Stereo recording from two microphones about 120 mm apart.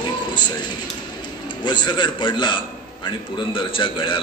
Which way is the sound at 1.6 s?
40° left (ahead or behind).